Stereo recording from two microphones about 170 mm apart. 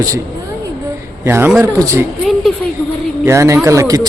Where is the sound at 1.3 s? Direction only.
15° right (ahead or behind).